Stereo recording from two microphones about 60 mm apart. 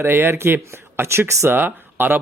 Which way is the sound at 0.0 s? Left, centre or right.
Right.